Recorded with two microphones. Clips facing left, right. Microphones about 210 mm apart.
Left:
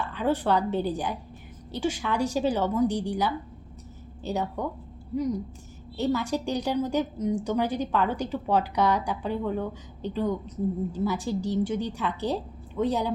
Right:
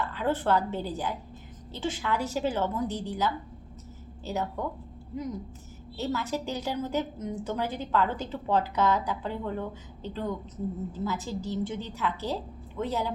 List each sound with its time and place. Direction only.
0.0 s a woman's voice: 15° left (ahead or behind)
6.0 s a woman's voice: 15° left (ahead or behind)